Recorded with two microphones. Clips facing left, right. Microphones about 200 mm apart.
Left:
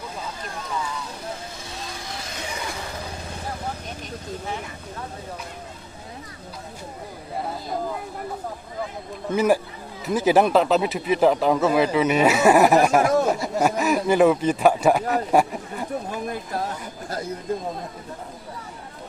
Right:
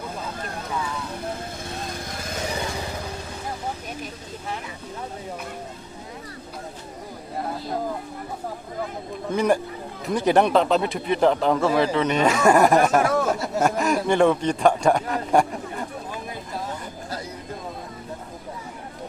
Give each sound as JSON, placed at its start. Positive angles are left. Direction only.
{"t": 1.7, "sound": "vehicle", "side_deg": -55}
{"t": 9.3, "sound": "a man's voice", "side_deg": 5}